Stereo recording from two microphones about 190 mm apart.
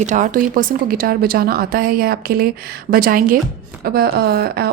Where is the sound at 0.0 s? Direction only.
40° right (ahead or behind).